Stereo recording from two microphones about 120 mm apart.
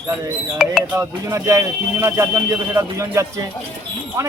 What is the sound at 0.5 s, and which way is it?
Speech, 5° right (ahead or behind).